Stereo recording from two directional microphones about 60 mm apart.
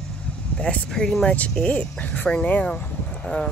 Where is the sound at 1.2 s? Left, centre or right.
Left.